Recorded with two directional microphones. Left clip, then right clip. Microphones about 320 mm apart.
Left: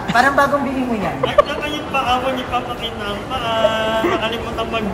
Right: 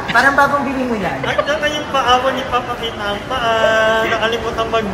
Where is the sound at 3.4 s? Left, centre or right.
Centre.